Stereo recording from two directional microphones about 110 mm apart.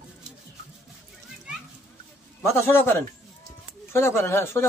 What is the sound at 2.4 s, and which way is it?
A man's voice, 20° left (ahead or behind).